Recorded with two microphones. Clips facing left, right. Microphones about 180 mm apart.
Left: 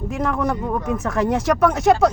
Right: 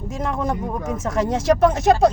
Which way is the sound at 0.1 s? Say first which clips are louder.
Left 2 dB; 25° right (ahead or behind).